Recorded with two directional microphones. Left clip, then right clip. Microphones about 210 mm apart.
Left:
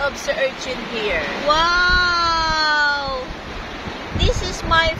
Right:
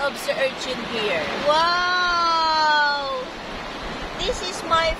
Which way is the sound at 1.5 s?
15° left (ahead or behind).